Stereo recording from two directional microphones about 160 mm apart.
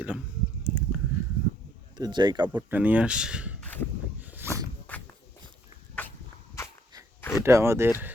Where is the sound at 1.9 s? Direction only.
25° right (ahead or behind).